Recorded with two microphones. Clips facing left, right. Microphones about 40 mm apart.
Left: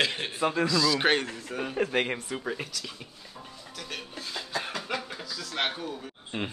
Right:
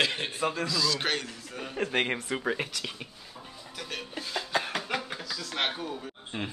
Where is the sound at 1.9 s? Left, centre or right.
Centre.